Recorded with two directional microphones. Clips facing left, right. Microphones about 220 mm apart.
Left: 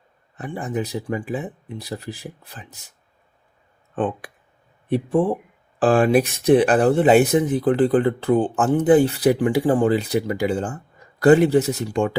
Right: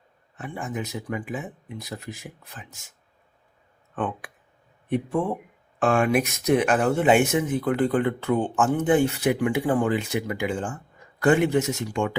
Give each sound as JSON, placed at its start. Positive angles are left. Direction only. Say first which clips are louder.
{"t": 0.3, "sound": "speech", "louder": "left 5 dB", "side_deg": 35}
{"t": 3.9, "sound": "speech", "louder": "left 5 dB", "side_deg": 30}